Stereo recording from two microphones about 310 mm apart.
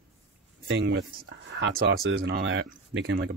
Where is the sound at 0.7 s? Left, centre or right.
Right.